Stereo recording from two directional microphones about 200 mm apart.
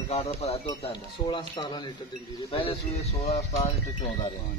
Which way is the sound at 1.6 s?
25° left (ahead or behind).